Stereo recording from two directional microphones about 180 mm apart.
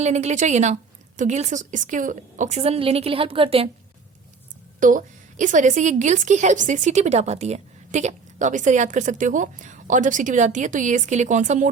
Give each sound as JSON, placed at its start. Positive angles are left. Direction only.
{"t": 0.0, "sound": "a woman's voice", "side_deg": -40}
{"t": 4.8, "sound": "a woman's voice", "side_deg": -45}